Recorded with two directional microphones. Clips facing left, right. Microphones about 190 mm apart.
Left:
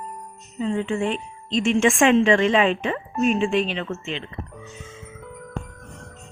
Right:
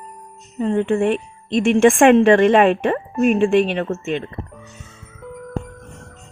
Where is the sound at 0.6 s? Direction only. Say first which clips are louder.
Right 6 dB; 55° right (ahead or behind).